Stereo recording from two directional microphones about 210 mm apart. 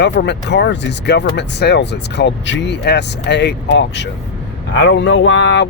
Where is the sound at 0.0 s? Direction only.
55° left (ahead or behind).